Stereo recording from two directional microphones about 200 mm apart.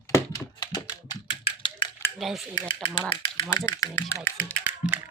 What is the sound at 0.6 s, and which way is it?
Typing, 20° left (ahead or behind).